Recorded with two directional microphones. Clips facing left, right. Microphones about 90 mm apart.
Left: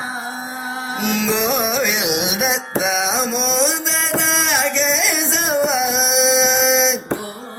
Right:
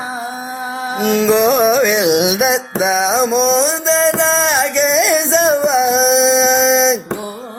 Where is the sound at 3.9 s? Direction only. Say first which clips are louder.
Right 8 dB; 30° right (ahead or behind).